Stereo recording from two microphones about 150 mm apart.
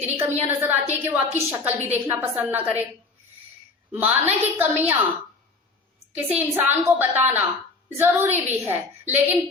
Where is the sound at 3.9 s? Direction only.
15° right (ahead or behind).